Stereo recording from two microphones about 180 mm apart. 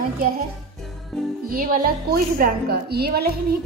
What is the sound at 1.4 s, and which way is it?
A woman's voice, 55° right (ahead or behind).